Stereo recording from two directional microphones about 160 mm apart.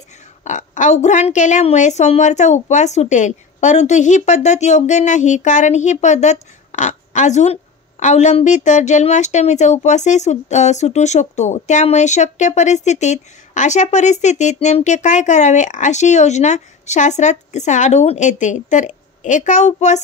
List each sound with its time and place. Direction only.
0.4 s a woman's voice: 50° left (ahead or behind)